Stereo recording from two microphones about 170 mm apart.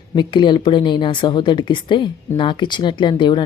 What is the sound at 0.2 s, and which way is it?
Speech, 25° left (ahead or behind).